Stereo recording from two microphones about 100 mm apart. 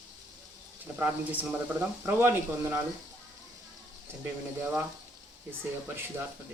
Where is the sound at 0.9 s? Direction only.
15° right (ahead or behind).